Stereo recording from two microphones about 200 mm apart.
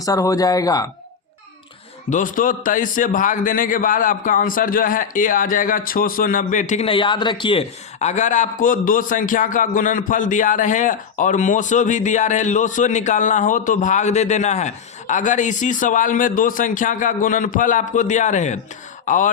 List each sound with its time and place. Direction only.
0.0 s speech: 15° left (ahead or behind)
2.0 s a man's voice: 40° left (ahead or behind)